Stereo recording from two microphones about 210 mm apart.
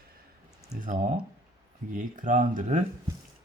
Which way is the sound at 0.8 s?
40° right (ahead or behind).